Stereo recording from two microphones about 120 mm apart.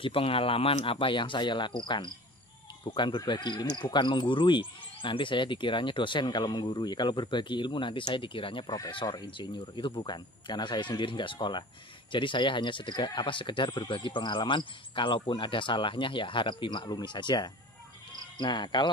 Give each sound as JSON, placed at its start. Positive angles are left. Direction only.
{"t": 0.0, "sound": "speech", "side_deg": 50}